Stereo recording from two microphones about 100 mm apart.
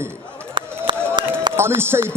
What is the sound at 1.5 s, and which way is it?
Speech, 25° right (ahead or behind).